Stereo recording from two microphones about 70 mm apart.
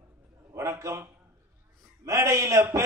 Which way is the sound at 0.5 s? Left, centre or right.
Right.